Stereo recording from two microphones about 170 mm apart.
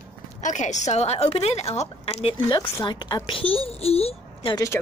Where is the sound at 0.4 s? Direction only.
45° left (ahead or behind).